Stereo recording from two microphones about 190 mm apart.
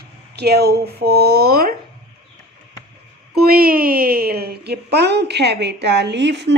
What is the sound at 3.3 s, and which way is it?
A woman's voice, 55° right (ahead or behind).